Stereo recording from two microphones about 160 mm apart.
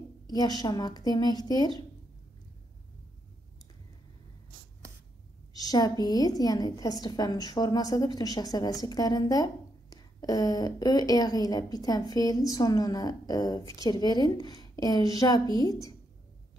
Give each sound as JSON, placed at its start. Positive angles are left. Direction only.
{"t": 0.3, "sound": "a woman's voice", "side_deg": 25}
{"t": 5.5, "sound": "a woman's voice", "side_deg": 25}